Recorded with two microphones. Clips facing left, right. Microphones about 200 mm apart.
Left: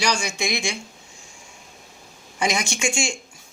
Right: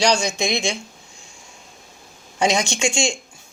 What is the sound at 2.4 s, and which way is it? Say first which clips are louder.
Speech: right 4 dB; 25° right (ahead or behind).